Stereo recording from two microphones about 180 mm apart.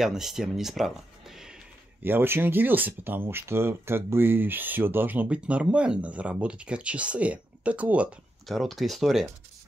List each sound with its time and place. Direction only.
0.0 s speech: centre (ahead or behind)